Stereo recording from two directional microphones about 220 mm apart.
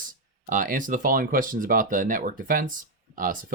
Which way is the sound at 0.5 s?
40° right (ahead or behind).